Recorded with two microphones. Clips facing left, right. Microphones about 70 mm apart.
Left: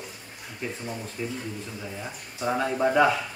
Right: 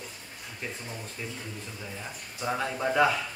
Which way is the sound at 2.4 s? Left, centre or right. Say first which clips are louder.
Left 5 dB; centre.